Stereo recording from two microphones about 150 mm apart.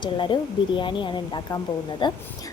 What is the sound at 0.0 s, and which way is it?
Speech, 35° left (ahead or behind).